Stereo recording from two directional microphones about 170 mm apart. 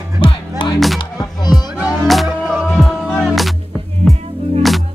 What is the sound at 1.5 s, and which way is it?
Music, centre (ahead or behind).